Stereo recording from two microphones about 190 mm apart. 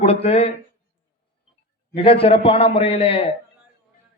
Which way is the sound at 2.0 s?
30° left (ahead or behind).